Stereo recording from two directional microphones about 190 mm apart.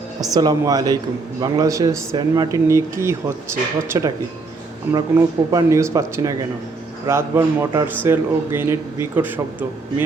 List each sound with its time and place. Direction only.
0.3 s speech: 20° right (ahead or behind)